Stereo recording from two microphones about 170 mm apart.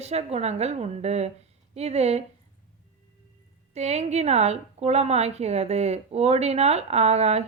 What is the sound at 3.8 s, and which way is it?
A woman's voice, 40° right (ahead or behind).